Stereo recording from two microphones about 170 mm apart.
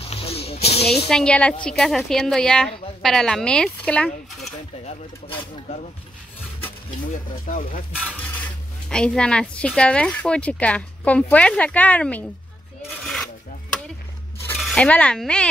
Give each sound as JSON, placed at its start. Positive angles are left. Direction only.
{"t": 0.1, "sound": "snake", "side_deg": 35}
{"t": 1.0, "sound": "a woman's voice", "side_deg": 5}
{"t": 7.4, "sound": "speech", "side_deg": 50}
{"t": 7.9, "sound": "stir", "side_deg": -5}
{"t": 8.8, "sound": "a woman's voice", "side_deg": 5}
{"t": 13.0, "sound": "a sound", "side_deg": 5}
{"t": 14.6, "sound": "speech", "side_deg": 5}